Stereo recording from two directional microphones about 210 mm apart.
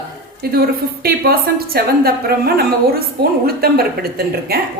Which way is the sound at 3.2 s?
45° right (ahead or behind).